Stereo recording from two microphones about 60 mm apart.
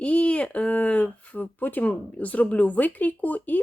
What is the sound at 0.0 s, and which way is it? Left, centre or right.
Speech, left.